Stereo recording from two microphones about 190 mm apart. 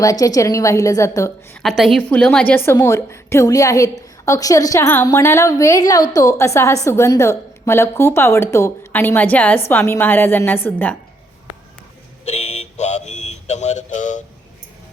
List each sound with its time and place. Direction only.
0.0 s a woman's voice: 20° left (ahead or behind)
1.6 s a woman's voice: centre (ahead or behind)
12.2 s a sound: 35° left (ahead or behind)